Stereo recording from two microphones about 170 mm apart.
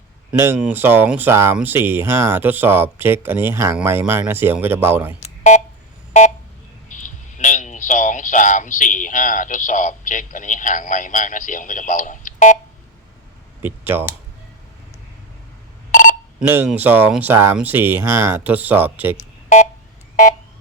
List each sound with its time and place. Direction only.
0.3 s speech: 15° right (ahead or behind)
5.2 s telephone dialing: 45° left (ahead or behind)
6.8 s speech: 45° left (ahead or behind)
13.6 s speech: 10° right (ahead or behind)
15.9 s telephone: 50° left (ahead or behind)
16.4 s speech: 10° right (ahead or behind)